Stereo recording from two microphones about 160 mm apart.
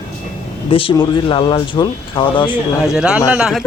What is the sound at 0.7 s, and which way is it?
Speech, 35° left (ahead or behind).